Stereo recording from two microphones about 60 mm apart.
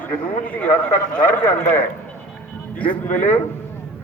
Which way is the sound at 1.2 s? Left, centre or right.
Left.